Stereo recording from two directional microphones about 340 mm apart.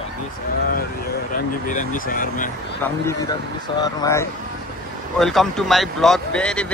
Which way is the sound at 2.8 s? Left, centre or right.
Centre.